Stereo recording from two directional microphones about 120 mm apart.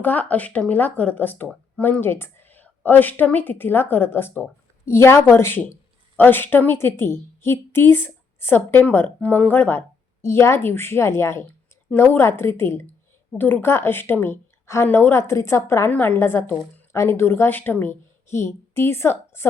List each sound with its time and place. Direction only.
0.0 s a woman's voice: 15° left (ahead or behind)